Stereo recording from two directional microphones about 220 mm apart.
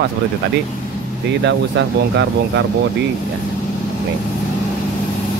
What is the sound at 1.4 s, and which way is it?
Speech, 55° right (ahead or behind).